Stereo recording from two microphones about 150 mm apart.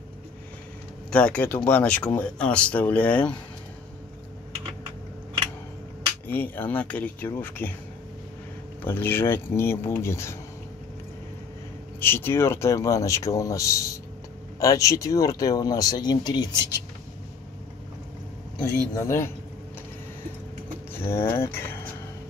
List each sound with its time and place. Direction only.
1.1 s speech: 5° left (ahead or behind)
6.2 s speech: 10° left (ahead or behind)
8.8 s speech: 15° left (ahead or behind)
12.0 s speech: 15° left (ahead or behind)
19.0 s speech: 15° left (ahead or behind)
20.9 s speech: 15° left (ahead or behind)